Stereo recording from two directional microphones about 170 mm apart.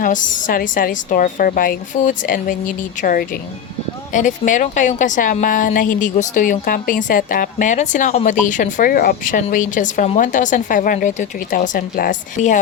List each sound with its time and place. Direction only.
0.0 s a woman's voice: 50° left (ahead or behind)